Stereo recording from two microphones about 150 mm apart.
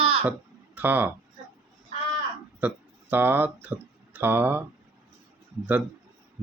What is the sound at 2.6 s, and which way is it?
Speech, 10° right (ahead or behind).